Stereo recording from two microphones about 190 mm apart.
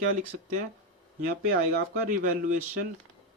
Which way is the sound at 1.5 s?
55° right (ahead or behind).